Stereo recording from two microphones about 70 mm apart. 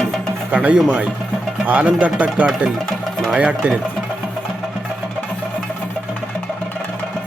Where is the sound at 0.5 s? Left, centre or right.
Right.